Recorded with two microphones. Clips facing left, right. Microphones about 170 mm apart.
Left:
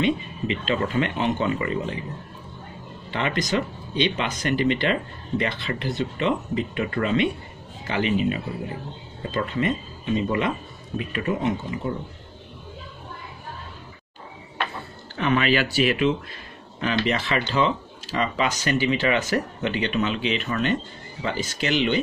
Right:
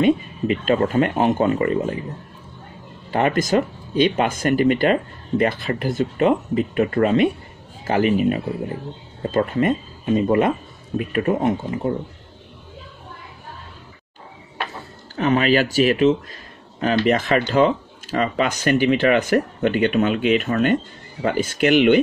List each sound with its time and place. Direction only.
0.0 s speech: 45° right (ahead or behind)
3.1 s speech: 45° right (ahead or behind)
15.1 s speech: 40° right (ahead or behind)